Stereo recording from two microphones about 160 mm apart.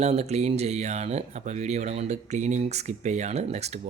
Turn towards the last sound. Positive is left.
turn(degrees=-45)  # may be behind; listen again after turning